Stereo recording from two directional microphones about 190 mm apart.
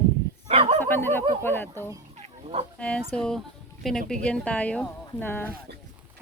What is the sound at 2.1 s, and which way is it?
Chicken, 35° right (ahead or behind).